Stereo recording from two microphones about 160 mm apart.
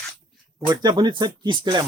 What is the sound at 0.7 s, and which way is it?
Speech, 25° right (ahead or behind).